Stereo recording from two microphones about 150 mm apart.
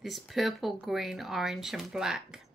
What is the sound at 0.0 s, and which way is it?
A woman's voice, centre (ahead or behind).